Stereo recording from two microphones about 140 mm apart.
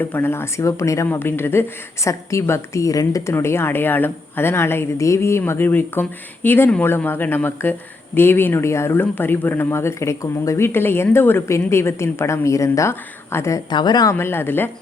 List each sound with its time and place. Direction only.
0.0 s a woman's voice: 15° left (ahead or behind)
13.7 s speech: 30° left (ahead or behind); by 14.7 s 15° left (ahead or behind)